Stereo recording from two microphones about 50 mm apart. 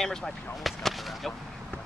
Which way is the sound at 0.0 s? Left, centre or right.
Centre.